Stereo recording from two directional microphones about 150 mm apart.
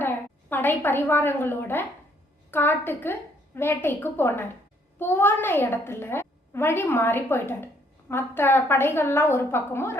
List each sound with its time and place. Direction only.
0.5 s a woman's voice: 15° left (ahead or behind)